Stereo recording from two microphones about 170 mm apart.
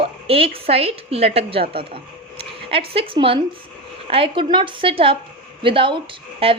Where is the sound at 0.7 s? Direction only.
35° right (ahead or behind).